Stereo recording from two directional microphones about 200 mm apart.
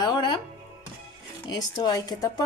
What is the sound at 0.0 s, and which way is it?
Music, 20° left (ahead or behind).